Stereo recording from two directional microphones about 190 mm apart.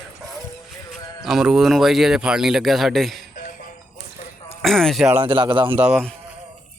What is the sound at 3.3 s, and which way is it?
Music, 45° left (ahead or behind).